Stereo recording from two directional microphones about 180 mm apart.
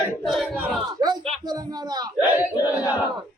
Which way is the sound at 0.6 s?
20° right (ahead or behind).